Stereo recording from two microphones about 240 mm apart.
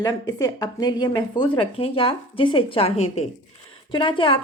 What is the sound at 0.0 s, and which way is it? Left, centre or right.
A woman's voice, centre.